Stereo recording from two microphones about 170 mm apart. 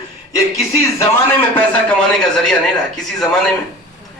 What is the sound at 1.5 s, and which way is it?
A man's voice, 5° left (ahead or behind).